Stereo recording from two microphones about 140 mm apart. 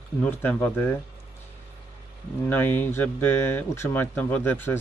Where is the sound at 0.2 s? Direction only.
10° left (ahead or behind).